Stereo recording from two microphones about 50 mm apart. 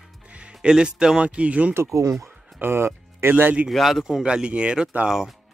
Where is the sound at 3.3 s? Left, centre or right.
Right.